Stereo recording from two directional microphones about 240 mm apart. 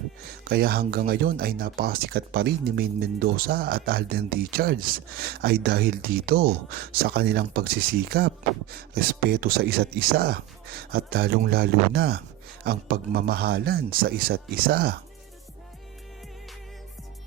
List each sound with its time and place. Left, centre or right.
0.4 s speech: right